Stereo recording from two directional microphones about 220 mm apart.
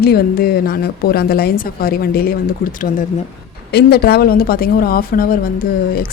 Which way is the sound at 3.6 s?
45° left (ahead or behind).